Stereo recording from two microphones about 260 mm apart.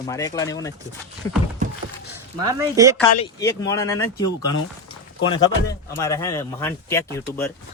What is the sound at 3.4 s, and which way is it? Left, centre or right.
Speech, centre.